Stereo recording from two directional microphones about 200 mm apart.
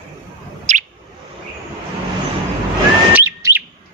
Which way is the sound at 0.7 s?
35° right (ahead or behind).